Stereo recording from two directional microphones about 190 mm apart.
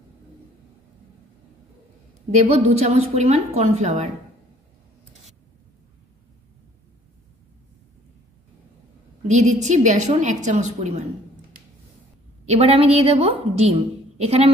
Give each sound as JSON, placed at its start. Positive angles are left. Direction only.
{"t": 2.4, "sound": "a woman's voice", "side_deg": -35}
{"t": 9.3, "sound": "a woman's voice", "side_deg": -40}
{"t": 12.4, "sound": "a woman's voice", "side_deg": -35}